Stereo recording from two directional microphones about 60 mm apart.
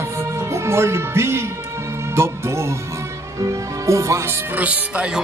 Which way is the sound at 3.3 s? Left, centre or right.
Right.